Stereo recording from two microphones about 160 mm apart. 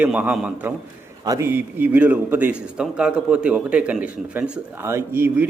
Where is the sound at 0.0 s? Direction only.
10° right (ahead or behind).